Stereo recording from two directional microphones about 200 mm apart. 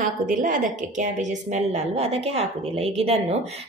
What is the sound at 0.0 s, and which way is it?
A woman's voice, 40° right (ahead or behind).